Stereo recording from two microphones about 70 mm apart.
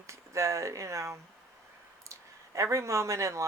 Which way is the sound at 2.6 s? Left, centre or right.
Right.